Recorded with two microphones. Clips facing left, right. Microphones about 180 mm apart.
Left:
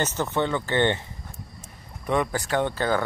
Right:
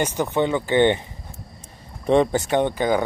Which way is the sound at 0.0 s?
15° right (ahead or behind).